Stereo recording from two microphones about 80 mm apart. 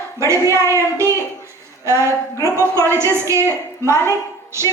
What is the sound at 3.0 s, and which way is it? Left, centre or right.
Speech, right.